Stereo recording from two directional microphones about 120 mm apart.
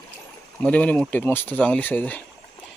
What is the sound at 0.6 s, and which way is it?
Speech, 10° left (ahead or behind).